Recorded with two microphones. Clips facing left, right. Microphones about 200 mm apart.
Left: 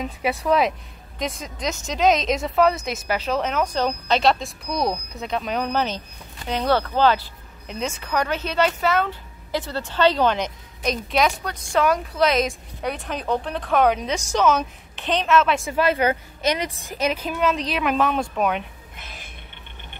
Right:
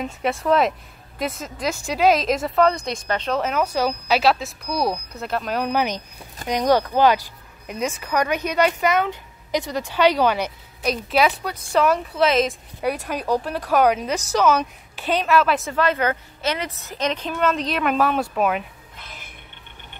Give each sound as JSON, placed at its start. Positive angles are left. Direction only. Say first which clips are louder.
{"t": 0.0, "sound": "a woman's voice", "louder": "right 1 dB", "side_deg": 0}
{"t": 15.6, "sound": "a woman's voice", "louder": "left 1 dB", "side_deg": 10}